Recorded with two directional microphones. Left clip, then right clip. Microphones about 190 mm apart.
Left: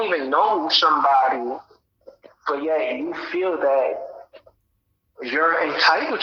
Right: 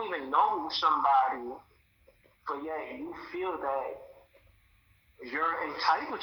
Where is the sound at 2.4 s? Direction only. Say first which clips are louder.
Left 14 dB; 40° left (ahead or behind).